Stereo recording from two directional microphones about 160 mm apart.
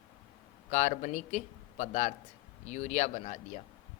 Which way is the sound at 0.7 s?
45° left (ahead or behind).